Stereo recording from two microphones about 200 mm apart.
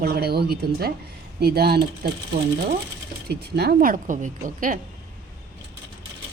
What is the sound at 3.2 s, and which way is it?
Speech, 50° right (ahead or behind).